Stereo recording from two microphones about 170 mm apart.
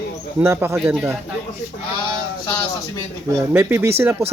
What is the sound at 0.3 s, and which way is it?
Speech, 15° right (ahead or behind).